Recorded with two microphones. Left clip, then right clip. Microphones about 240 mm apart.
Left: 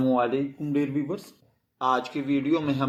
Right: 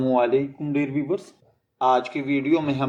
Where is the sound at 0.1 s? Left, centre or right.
Left.